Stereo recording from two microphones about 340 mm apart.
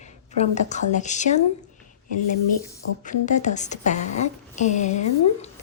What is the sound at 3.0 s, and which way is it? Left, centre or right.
Speech, left.